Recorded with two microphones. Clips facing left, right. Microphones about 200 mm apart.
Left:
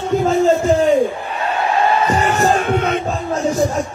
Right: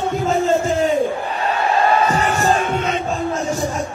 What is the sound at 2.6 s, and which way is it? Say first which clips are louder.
Music: left 3 dB; 55° left (ahead or behind).